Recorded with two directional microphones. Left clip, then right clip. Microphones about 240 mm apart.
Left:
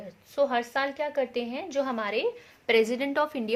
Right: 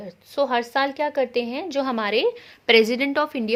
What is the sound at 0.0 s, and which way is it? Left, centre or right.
A woman's voice, right.